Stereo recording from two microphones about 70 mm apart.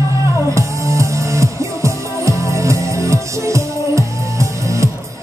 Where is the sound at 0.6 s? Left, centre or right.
Right.